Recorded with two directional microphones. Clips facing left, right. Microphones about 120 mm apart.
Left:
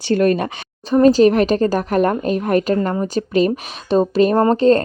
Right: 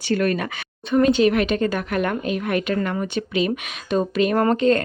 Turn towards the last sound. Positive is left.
turn(degrees=35)  # may be behind; listen again after turning